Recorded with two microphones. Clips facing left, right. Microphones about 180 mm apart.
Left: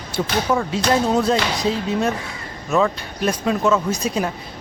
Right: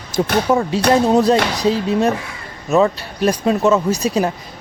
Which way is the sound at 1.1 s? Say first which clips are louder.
Right 5 dB; 35° right (ahead or behind).